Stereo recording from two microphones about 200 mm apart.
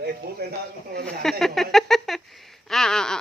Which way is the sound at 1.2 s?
Centre (ahead or behind).